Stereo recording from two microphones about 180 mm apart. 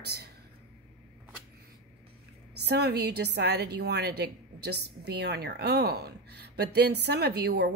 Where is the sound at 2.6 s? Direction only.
65° right (ahead or behind).